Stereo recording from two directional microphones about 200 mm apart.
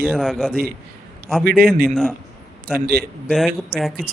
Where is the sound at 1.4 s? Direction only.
50° right (ahead or behind).